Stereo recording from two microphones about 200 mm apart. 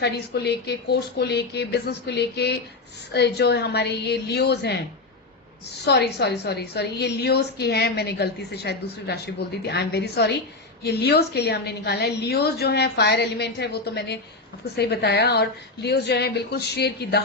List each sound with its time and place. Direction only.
0.0 s a woman's voice: 55° left (ahead or behind)
5.8 s a woman's voice: 55° left (ahead or behind)